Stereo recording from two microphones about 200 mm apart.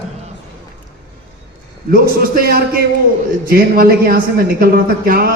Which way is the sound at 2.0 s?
45° right (ahead or behind).